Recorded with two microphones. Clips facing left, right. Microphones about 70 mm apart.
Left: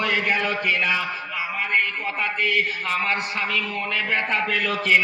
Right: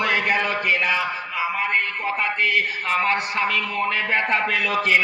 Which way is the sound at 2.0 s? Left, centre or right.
Right.